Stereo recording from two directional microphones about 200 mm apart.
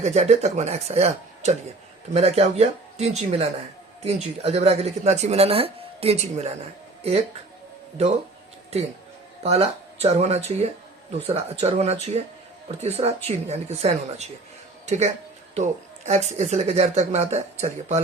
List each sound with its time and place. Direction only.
0.0 s speech: 35° right (ahead or behind)
9.4 s speech: 30° right (ahead or behind)